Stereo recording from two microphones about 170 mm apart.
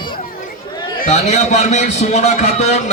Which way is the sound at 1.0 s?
45° left (ahead or behind).